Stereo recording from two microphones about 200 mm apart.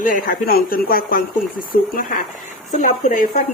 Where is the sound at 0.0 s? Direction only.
45° left (ahead or behind).